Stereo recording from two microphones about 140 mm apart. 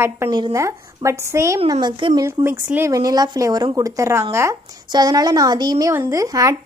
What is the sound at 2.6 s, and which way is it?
Speech, 15° right (ahead or behind).